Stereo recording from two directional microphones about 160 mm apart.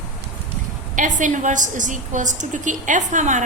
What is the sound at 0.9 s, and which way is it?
A woman's voice, 55° right (ahead or behind).